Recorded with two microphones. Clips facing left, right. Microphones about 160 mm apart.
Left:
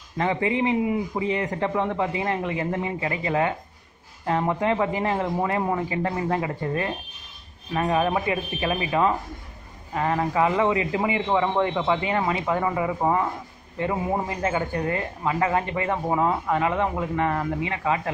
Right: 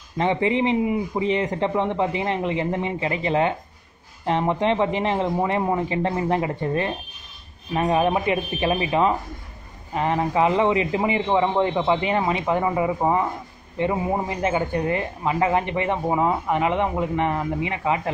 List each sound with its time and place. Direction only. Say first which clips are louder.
0.2 s a man's voice: right 2 dB; 20° right (ahead or behind)
14.3 s speech: right 3 dB; 20° right (ahead or behind)